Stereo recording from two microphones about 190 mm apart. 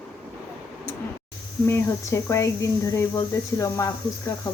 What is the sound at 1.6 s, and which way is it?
Speech, 15° left (ahead or behind).